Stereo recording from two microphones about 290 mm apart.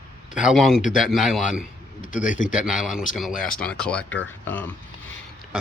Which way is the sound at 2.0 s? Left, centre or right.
Left.